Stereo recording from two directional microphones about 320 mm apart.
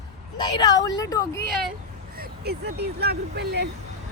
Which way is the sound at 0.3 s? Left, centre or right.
Centre.